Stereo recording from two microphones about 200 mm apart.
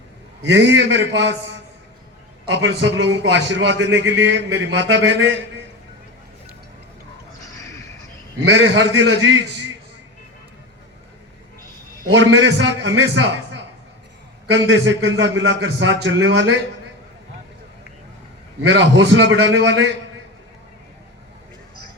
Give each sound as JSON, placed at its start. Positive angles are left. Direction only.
{"t": 0.4, "sound": "a man's voice", "side_deg": -65}
{"t": 2.5, "sound": "a man's voice", "side_deg": -65}
{"t": 7.4, "sound": "a sound", "side_deg": 15}
{"t": 8.4, "sound": "a man's voice", "side_deg": -70}
{"t": 12.1, "sound": "a man's voice", "side_deg": -70}
{"t": 14.4, "sound": "a man's voice", "side_deg": -70}
{"t": 18.7, "sound": "a man's voice", "side_deg": -70}